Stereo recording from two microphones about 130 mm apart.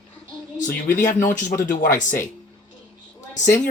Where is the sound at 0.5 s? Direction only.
75° left (ahead or behind).